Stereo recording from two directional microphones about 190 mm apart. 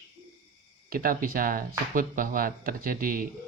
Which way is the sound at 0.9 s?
50° right (ahead or behind).